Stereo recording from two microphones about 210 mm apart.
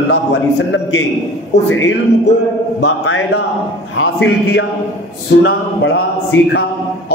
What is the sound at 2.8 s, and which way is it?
A man's voice, 55° left (ahead or behind).